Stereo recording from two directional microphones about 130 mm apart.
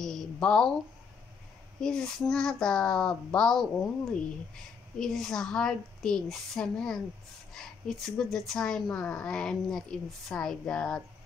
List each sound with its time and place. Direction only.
0.0 s a sound: 5° left (ahead or behind)
1.8 s speech: 5° left (ahead or behind)
4.9 s speech: 5° left (ahead or behind)